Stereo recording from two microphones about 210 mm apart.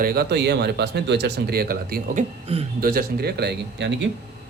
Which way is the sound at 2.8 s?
45° right (ahead or behind).